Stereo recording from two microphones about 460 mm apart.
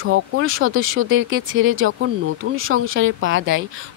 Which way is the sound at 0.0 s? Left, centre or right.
Right.